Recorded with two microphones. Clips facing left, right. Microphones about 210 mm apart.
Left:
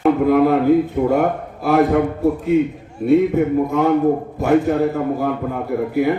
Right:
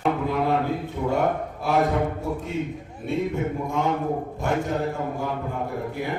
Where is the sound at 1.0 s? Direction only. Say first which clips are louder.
Left 6 dB; 60° left (ahead or behind).